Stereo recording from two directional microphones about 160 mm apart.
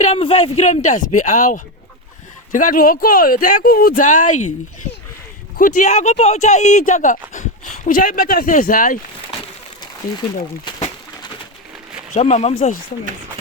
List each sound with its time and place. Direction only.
0.0 s speech: 35° left (ahead or behind); by 4.5 s 50° left (ahead or behind)
5.5 s speech: 55° left (ahead or behind)
12.1 s speech: 45° left (ahead or behind)